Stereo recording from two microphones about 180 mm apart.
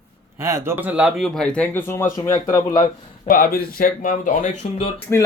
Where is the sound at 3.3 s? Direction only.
55° left (ahead or behind).